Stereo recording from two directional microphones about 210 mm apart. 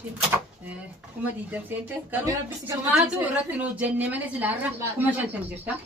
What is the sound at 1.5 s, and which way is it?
A woman's voice, 10° right (ahead or behind).